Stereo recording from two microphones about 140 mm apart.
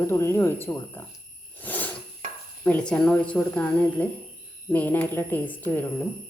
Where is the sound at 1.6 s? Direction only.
10° left (ahead or behind).